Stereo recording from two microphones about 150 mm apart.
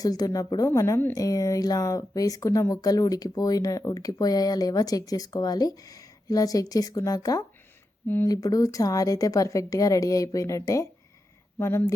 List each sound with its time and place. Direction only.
0.0 s a woman's voice: 25° left (ahead or behind)
8.0 s speech: 15° left (ahead or behind)
8.3 s a woman's voice: 25° left (ahead or behind)